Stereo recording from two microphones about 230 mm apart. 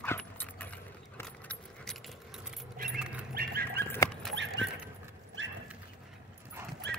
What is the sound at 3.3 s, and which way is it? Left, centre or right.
Dog, right.